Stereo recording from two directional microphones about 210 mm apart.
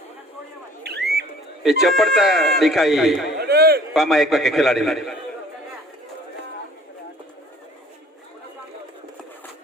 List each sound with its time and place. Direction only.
1.6 s a man's voice: centre (ahead or behind)
3.3 s a man's voice: 50° right (ahead or behind)
3.9 s a man's voice: centre (ahead or behind)